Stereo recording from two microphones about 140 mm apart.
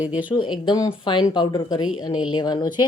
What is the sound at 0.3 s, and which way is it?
Speech, 35° left (ahead or behind).